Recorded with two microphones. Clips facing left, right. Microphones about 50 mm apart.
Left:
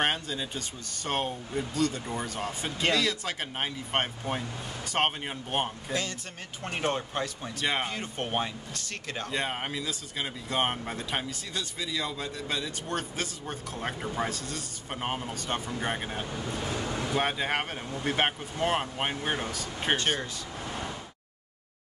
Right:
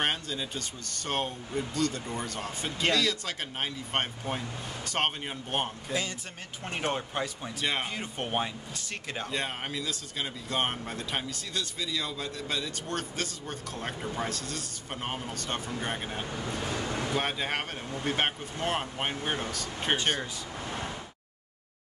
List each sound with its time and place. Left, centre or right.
0.0 s speech: centre
9.3 s speech: centre
20.1 s speech: centre